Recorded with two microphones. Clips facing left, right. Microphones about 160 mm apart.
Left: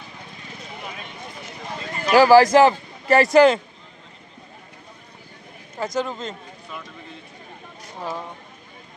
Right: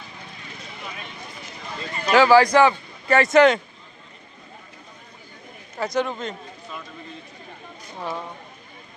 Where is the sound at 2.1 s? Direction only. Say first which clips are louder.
Left 2 dB; 40° left (ahead or behind).